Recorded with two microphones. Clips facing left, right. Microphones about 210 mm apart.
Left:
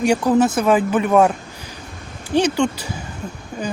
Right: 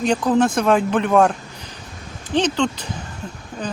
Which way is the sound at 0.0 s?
10° left (ahead or behind).